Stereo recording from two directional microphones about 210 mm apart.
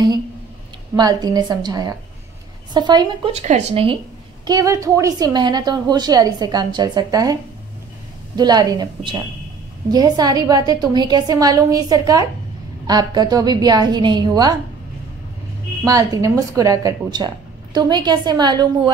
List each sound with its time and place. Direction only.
0.9 s a woman's voice: 20° right (ahead or behind)
3.4 s a woman's voice: 30° right (ahead or behind)
4.5 s a woman's voice: 15° right (ahead or behind)
8.4 s a woman's voice: 20° right (ahead or behind)
15.8 s a woman's voice: 15° right (ahead or behind)